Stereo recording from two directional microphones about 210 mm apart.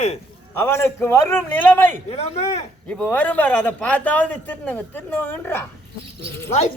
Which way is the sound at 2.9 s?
5° left (ahead or behind).